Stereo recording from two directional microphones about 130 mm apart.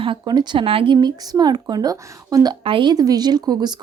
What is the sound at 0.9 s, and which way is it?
A woman's voice, 30° right (ahead or behind).